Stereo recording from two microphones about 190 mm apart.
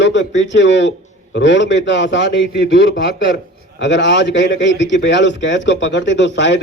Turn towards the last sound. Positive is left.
turn(degrees=70)  # may be behind; listen again after turning